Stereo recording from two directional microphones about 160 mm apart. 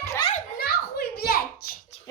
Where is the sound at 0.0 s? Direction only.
20° left (ahead or behind).